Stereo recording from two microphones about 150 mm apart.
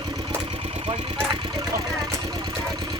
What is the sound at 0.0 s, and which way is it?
Vehicle, 30° right (ahead or behind).